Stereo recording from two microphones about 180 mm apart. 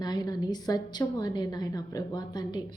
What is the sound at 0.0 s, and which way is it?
A woman's voice, 20° left (ahead or behind).